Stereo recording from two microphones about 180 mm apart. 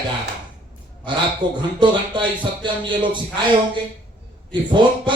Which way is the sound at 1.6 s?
25° right (ahead or behind).